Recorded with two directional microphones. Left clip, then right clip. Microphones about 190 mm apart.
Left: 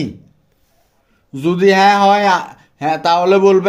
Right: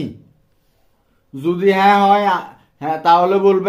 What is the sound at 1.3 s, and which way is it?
Speech, 40° left (ahead or behind).